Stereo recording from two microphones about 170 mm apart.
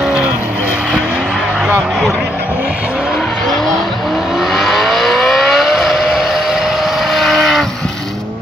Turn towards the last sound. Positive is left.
turn(degrees=0)  # may be behind; listen again after turning